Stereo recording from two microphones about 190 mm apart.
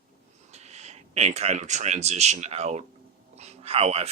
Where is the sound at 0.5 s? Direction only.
35° right (ahead or behind).